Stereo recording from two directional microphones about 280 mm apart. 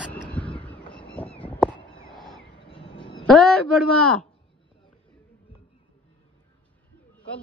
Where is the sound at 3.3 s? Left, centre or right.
Centre.